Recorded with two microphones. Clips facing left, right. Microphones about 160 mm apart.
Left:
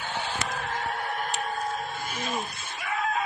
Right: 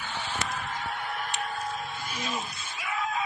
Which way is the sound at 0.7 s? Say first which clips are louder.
Left 3 dB; 45° left (ahead or behind).